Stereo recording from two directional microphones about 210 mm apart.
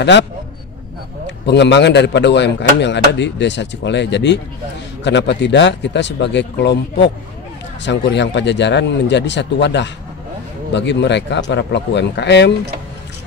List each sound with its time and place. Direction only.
1.2 s speech: 55° left (ahead or behind)